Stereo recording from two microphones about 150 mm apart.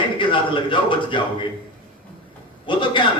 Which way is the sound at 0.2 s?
35° left (ahead or behind).